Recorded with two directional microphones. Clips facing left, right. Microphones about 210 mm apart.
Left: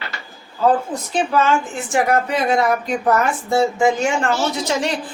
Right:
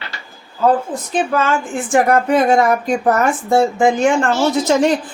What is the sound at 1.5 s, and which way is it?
A woman's voice, 50° right (ahead or behind).